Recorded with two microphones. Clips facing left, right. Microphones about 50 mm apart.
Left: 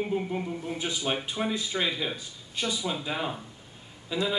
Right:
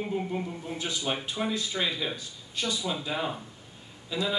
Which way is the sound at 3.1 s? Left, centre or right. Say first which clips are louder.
Even; centre.